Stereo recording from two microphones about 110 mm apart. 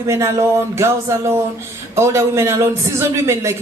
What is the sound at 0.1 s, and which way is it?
A man's voice, 25° right (ahead or behind).